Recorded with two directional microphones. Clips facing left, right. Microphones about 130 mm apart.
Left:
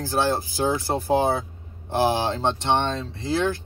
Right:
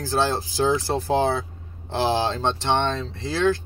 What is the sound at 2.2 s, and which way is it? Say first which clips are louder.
Speech: even; 15° left (ahead or behind).